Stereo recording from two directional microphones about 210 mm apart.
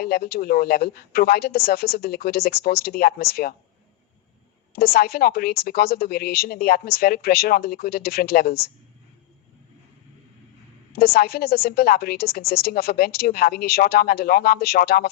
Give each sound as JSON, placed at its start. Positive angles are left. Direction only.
{"t": 0.0, "sound": "a woman's voice", "side_deg": 45}
{"t": 4.7, "sound": "a woman's voice", "side_deg": 45}
{"t": 10.9, "sound": "a woman's voice", "side_deg": 45}